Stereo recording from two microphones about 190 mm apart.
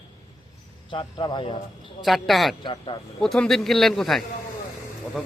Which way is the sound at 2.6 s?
25° left (ahead or behind).